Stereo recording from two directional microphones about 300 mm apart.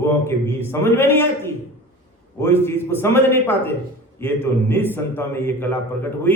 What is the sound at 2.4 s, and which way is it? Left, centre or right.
Speech, centre.